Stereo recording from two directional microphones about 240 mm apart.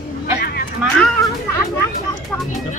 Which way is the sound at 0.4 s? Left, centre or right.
Left.